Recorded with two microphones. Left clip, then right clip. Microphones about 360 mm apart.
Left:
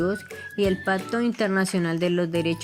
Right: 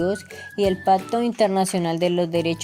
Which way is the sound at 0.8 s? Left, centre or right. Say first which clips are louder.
Right 6 dB; right.